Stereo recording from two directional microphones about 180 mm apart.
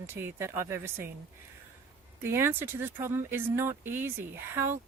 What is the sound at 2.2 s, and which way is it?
Speech, 15° right (ahead or behind).